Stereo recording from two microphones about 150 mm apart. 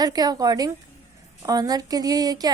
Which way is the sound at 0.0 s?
25° right (ahead or behind).